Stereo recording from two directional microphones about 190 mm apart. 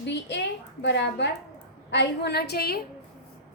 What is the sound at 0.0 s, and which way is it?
A woman's voice, 65° left (ahead or behind).